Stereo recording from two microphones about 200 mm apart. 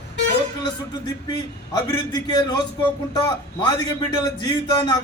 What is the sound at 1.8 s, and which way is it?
Speech, 20° left (ahead or behind).